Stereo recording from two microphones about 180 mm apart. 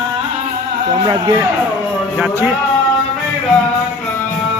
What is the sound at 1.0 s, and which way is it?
Speech, 20° right (ahead or behind).